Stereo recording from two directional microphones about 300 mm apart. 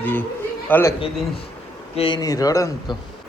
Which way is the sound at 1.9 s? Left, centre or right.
Centre.